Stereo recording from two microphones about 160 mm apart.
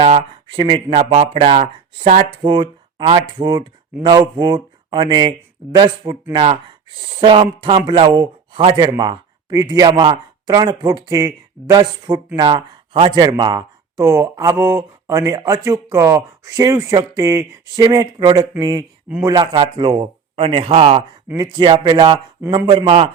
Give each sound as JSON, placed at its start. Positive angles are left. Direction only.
{"t": 0.0, "sound": "a man's voice", "side_deg": -35}
{"t": 2.4, "sound": "a man's voice", "side_deg": -30}
{"t": 21.2, "sound": "a man's voice", "side_deg": -25}